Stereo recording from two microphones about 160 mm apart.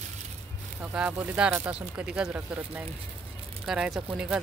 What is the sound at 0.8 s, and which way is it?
Speech, 10° right (ahead or behind).